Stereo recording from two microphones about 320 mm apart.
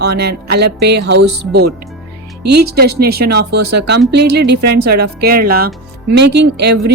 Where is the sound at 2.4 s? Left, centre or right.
Right.